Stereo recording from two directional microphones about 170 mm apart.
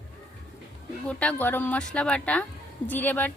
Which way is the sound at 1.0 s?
10° left (ahead or behind).